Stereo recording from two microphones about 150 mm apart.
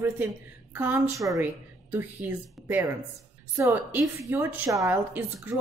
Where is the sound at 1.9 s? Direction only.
10° right (ahead or behind).